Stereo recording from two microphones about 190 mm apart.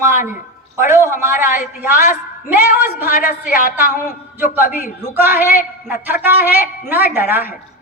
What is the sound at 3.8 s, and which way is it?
Speech, 45° left (ahead or behind).